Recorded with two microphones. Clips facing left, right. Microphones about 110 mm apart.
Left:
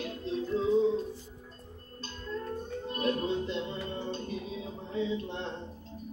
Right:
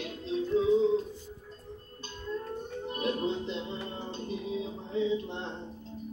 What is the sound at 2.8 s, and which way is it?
Music, 20° right (ahead or behind).